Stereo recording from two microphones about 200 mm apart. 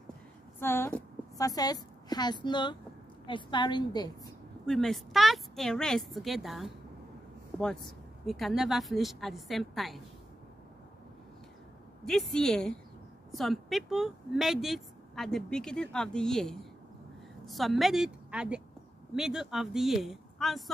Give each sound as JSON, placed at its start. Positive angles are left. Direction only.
{"t": 0.6, "sound": "a woman's voice", "side_deg": 10}
{"t": 4.6, "sound": "speech", "side_deg": 0}
{"t": 12.0, "sound": "a woman's voice", "side_deg": 0}